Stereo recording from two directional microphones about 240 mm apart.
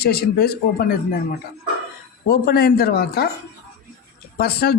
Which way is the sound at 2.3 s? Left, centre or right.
Left.